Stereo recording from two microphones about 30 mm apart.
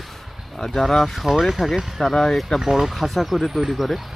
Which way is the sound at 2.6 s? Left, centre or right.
Centre.